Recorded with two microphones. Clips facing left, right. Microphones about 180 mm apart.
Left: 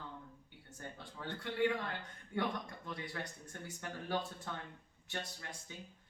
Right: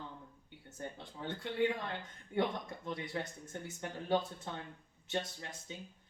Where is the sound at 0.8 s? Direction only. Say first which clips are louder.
Right 4 dB; 20° right (ahead or behind).